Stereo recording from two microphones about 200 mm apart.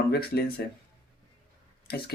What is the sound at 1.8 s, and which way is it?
Speech, 50° left (ahead or behind).